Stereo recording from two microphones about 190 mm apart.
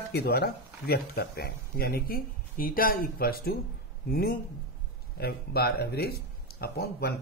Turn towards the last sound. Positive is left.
turn(degrees=55)  # may be behind; listen again after turning